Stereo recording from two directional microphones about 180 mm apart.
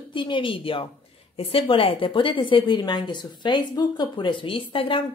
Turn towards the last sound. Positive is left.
turn(degrees=30)  # may be behind; listen again after turning